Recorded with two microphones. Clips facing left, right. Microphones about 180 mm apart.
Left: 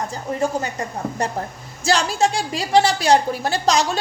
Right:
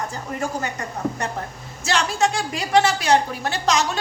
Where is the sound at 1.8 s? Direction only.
35° left (ahead or behind).